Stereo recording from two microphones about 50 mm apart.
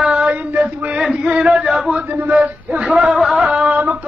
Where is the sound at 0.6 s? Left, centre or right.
Right.